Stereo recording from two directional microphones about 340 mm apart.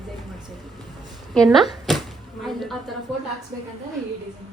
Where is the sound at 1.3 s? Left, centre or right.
Centre.